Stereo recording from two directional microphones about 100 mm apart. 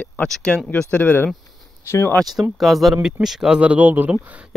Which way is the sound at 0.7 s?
15° left (ahead or behind).